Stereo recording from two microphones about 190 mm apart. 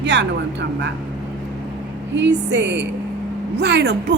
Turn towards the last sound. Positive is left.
turn(degrees=-65)  # may be behind; listen again after turning